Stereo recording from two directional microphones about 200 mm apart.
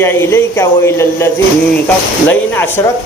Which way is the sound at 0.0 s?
10° left (ahead or behind).